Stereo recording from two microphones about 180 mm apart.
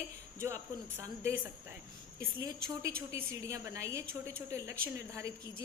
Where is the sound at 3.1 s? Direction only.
15° right (ahead or behind).